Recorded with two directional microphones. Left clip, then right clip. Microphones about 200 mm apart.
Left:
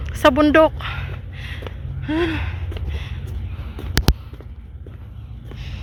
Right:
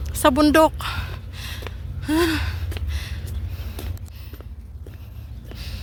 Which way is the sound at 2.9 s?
45° right (ahead or behind).